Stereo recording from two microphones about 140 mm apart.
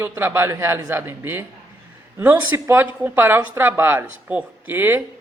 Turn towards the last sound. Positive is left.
turn(degrees=-15)  # may be behind; listen again after turning